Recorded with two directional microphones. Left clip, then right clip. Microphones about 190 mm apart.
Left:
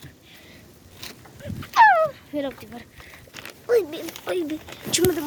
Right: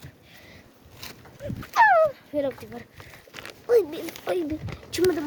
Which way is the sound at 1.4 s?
10° right (ahead or behind).